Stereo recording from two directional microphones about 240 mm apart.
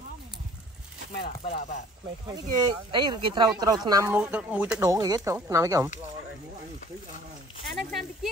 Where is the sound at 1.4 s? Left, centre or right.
Left.